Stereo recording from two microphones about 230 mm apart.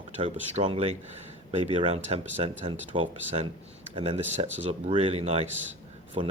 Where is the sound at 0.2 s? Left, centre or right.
Right.